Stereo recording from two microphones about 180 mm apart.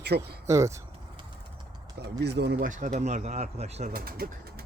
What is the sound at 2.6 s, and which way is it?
Speech, 45° right (ahead or behind).